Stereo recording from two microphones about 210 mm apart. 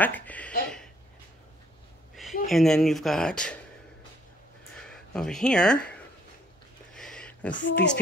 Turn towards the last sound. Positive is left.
turn(degrees=60)  # may be behind; listen again after turning